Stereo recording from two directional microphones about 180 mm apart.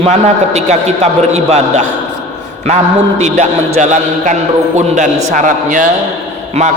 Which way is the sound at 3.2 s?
40° right (ahead or behind).